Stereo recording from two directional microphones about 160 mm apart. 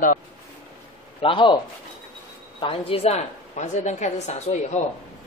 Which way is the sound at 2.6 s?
35° left (ahead or behind).